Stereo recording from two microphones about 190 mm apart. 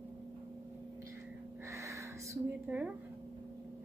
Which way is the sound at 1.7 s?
15° right (ahead or behind).